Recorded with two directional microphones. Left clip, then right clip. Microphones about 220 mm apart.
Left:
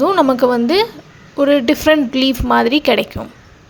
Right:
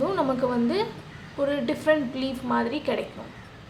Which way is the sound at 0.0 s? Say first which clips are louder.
Left 12 dB; 40° left (ahead or behind).